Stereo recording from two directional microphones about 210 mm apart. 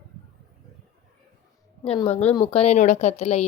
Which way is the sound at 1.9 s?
30° left (ahead or behind).